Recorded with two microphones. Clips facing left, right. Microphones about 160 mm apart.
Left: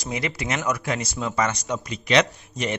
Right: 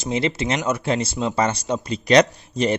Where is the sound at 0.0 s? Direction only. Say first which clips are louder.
Right 6 dB; 30° right (ahead or behind).